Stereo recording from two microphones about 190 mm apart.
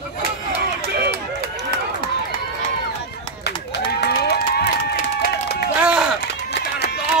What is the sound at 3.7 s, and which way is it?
Run, 55° left (ahead or behind).